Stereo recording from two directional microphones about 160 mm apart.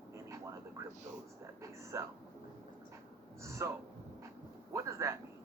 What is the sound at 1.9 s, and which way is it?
Speech, 20° right (ahead or behind).